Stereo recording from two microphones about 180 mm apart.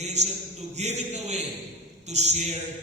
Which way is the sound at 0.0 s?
40° right (ahead or behind).